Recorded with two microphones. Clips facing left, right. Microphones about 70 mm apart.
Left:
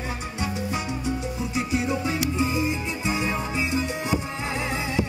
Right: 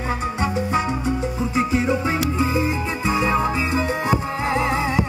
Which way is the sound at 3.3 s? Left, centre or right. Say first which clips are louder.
Right 7 dB; right.